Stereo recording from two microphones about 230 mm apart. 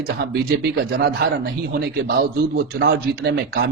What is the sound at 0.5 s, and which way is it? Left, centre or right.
Speech, right.